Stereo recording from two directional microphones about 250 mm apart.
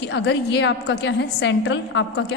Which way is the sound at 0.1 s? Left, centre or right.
Left.